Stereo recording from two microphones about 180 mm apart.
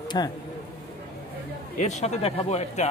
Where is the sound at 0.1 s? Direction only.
20° left (ahead or behind).